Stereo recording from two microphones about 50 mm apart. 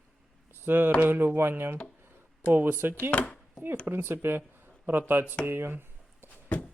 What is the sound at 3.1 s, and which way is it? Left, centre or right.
Speech, left.